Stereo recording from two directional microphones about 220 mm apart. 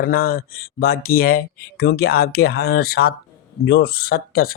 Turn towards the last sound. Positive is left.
turn(degrees=45)  # may be behind; listen again after turning